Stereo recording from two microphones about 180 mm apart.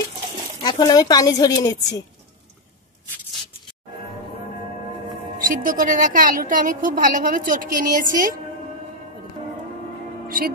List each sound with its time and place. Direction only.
0.6 s speech: 25° left (ahead or behind)
5.4 s a woman's voice: 45° right (ahead or behind)
10.2 s music: 55° right (ahead or behind)